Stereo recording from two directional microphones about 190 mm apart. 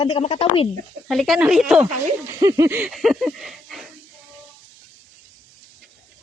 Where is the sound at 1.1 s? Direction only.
Centre (ahead or behind).